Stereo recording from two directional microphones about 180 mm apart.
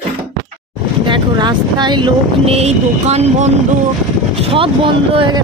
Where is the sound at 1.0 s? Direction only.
25° right (ahead or behind).